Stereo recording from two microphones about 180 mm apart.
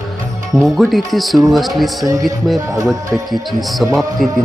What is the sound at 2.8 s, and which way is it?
Speech, centre (ahead or behind).